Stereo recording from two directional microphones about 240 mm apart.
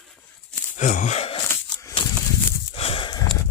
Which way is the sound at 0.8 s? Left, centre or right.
Left.